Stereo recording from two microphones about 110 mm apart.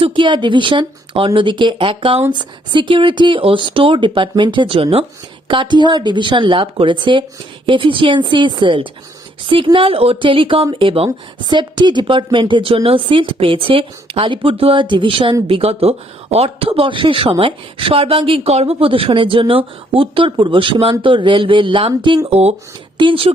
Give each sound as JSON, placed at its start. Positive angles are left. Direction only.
{"t": 0.0, "sound": "speech", "side_deg": -45}
{"t": 5.5, "sound": "speech", "side_deg": -45}
{"t": 11.4, "sound": "speech", "side_deg": -45}
{"t": 22.3, "sound": "speech", "side_deg": -70}
{"t": 23.0, "sound": "speech", "side_deg": -50}